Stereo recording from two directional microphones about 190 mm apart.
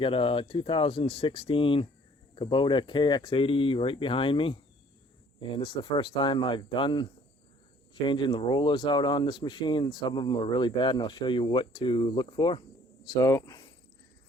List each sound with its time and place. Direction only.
0.0 s speech: 30° left (ahead or behind)